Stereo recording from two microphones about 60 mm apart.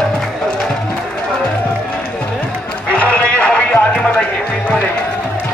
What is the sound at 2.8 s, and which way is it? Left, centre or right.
Run, left.